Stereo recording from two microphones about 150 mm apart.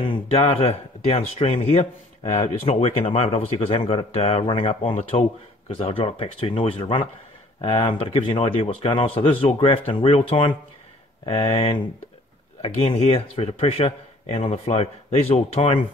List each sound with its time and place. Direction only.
0.0 s speech: 35° left (ahead or behind)